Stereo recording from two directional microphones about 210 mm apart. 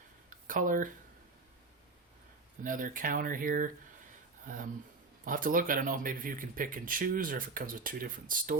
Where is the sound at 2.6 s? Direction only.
40° right (ahead or behind).